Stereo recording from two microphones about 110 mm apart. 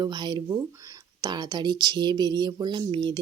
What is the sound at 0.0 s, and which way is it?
A woman's voice, 40° right (ahead or behind).